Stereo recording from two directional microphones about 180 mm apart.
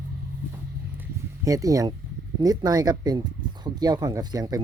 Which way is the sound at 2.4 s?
20° right (ahead or behind).